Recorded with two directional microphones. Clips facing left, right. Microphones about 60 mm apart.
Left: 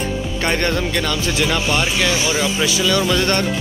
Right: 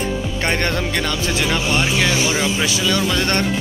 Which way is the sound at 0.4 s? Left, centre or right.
Right.